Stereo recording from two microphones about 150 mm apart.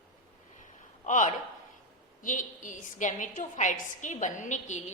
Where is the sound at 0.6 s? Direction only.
55° left (ahead or behind).